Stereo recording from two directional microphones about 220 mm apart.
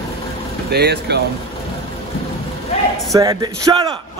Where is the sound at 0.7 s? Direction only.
45° right (ahead or behind).